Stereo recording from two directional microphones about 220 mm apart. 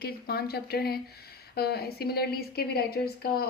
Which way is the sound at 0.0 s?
45° left (ahead or behind).